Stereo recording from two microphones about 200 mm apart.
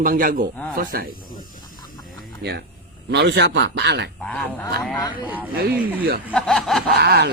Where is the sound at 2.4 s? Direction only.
55° right (ahead or behind).